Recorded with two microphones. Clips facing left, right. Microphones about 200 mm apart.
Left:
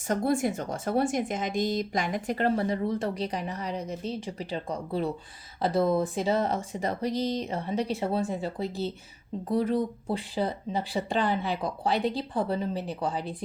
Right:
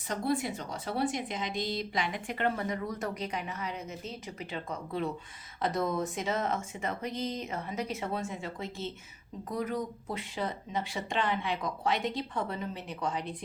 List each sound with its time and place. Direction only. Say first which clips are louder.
0.1 s speech: left 5 dB; 50° left (ahead or behind)